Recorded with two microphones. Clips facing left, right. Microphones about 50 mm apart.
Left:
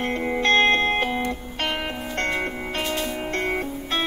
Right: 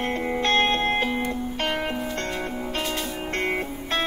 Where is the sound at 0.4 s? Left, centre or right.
Left.